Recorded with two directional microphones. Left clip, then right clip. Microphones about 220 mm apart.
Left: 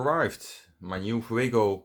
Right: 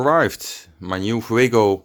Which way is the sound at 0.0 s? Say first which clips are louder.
Right 9 dB; 40° right (ahead or behind).